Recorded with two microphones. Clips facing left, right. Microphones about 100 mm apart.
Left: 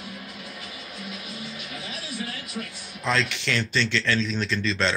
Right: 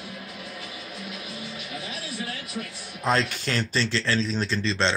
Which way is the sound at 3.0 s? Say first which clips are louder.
Right 1 dB; 40° right (ahead or behind).